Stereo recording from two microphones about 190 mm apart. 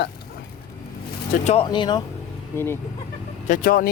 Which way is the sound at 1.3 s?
35° left (ahead or behind).